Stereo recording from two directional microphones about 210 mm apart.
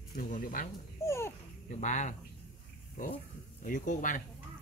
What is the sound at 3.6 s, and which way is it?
Speech, 40° left (ahead or behind).